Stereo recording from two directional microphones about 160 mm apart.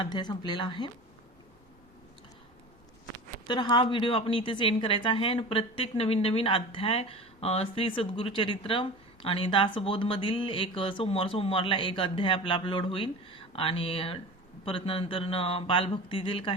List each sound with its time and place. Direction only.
0.0 s speech: 25° left (ahead or behind)
3.4 s a woman's voice: 30° left (ahead or behind)